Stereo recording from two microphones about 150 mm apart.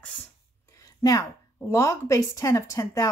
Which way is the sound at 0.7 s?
20° left (ahead or behind).